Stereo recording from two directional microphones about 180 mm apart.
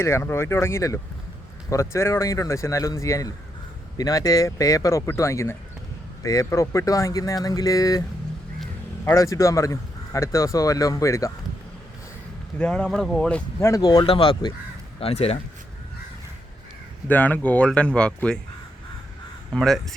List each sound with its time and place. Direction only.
0.0 s speech: 15° left (ahead or behind)
9.0 s speech: 15° left (ahead or behind)
12.5 s speech: 5° left (ahead or behind); by 15.4 s 35° left (ahead or behind)
17.1 s speech: 10° left (ahead or behind)
19.5 s speech: centre (ahead or behind)